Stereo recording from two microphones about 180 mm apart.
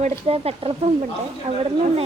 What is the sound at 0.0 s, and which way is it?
Speech, 35° right (ahead or behind).